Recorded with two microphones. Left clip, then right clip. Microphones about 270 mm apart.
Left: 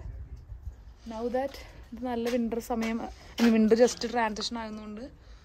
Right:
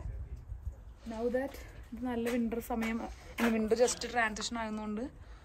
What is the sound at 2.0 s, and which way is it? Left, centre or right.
Speech, left.